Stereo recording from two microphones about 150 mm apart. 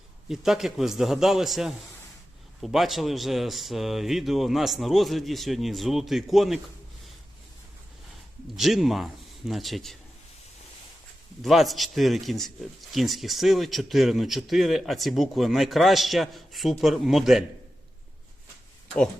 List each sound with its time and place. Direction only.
0.3 s speech: centre (ahead or behind)
8.5 s speech: centre (ahead or behind)
11.4 s speech: centre (ahead or behind)